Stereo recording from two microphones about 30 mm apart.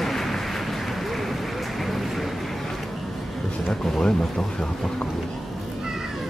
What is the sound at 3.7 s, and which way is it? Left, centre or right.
Speech, left.